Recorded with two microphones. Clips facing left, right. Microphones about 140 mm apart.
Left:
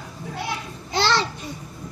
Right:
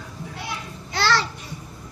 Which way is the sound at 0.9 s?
20° left (ahead or behind).